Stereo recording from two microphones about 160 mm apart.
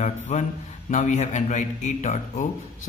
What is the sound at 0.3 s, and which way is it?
Speech, 45° left (ahead or behind).